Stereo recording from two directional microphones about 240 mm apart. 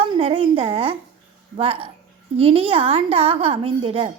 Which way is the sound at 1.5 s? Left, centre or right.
Right.